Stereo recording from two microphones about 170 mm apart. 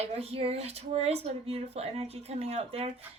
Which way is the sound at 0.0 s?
35° right (ahead or behind).